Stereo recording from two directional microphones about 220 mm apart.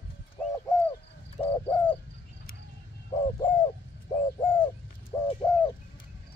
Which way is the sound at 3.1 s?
20° left (ahead or behind).